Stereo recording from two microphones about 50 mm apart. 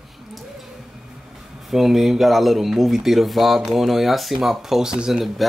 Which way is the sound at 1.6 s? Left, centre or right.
Centre.